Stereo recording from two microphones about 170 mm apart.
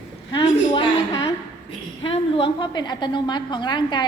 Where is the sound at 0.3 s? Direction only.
30° left (ahead or behind).